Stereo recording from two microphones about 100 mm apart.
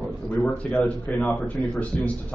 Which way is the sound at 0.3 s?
15° left (ahead or behind).